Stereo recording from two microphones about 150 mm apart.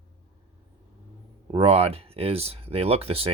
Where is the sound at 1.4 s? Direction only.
35° right (ahead or behind).